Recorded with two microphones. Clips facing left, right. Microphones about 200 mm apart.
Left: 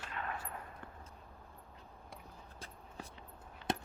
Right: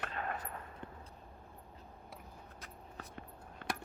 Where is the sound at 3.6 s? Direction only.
55° right (ahead or behind).